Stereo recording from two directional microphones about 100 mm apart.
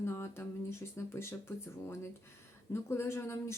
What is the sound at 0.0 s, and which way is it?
Speech, 25° left (ahead or behind).